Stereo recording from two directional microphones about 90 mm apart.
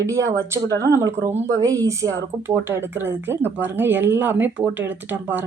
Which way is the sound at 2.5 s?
25° right (ahead or behind).